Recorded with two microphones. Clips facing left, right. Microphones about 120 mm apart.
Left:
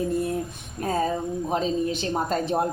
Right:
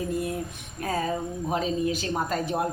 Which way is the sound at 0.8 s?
30° left (ahead or behind).